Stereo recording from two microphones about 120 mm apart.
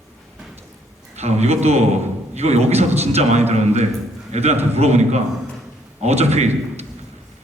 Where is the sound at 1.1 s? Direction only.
65° right (ahead or behind).